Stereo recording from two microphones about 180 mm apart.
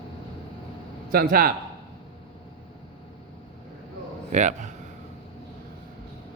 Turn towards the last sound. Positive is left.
turn(degrees=-40)  # may be behind; listen again after turning